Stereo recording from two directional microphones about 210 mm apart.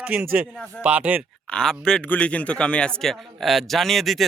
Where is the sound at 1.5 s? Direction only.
5° left (ahead or behind).